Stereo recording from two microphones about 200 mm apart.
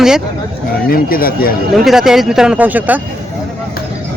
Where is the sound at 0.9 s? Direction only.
45° left (ahead or behind).